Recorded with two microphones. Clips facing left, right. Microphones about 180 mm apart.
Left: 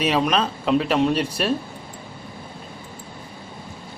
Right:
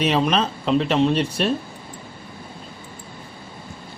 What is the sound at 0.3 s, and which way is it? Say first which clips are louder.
Speech: even; 5° left (ahead or behind).